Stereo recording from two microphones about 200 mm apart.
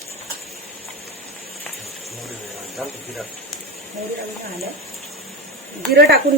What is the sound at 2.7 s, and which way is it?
Speech, centre (ahead or behind).